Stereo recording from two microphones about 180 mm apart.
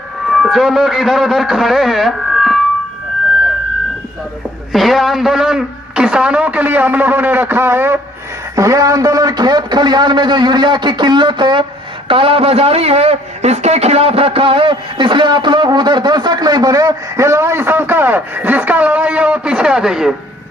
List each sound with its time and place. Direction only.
0.3 s speech: centre (ahead or behind)
4.7 s a man's voice: centre (ahead or behind)